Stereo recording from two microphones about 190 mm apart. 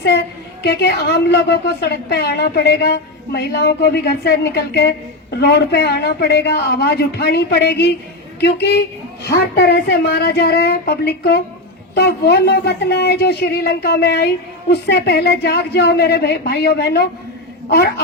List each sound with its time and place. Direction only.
0.6 s a woman's voice: 60° left (ahead or behind)